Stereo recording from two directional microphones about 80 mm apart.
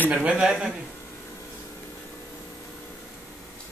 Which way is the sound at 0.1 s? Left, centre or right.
Centre.